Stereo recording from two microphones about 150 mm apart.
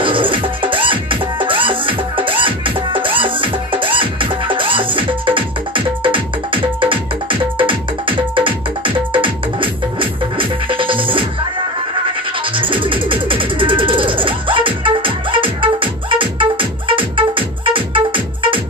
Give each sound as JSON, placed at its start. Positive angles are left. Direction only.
{"t": 0.0, "sound": "music", "side_deg": -35}
{"t": 12.5, "sound": "music", "side_deg": -35}